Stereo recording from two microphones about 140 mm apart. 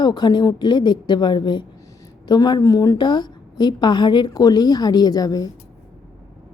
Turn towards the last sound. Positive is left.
turn(degrees=25)  # may be behind; listen again after turning